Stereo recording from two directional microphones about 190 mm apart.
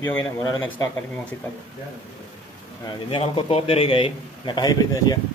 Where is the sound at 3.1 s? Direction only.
30° left (ahead or behind).